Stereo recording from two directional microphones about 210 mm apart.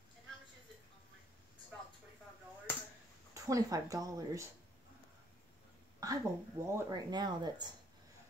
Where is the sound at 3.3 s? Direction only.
15° right (ahead or behind).